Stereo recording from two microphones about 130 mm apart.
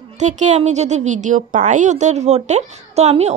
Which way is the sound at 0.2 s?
65° right (ahead or behind).